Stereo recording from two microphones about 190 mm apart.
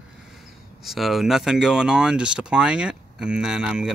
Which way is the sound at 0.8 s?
Centre (ahead or behind).